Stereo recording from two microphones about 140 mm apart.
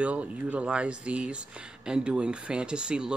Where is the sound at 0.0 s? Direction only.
10° right (ahead or behind).